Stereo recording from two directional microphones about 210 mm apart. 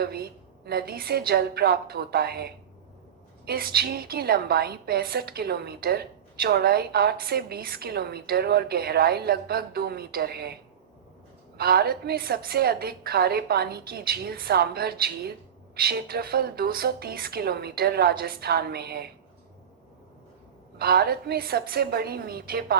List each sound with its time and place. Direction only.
0.0 s a woman's voice: 50° right (ahead or behind)
20.7 s a woman's voice: 50° right (ahead or behind)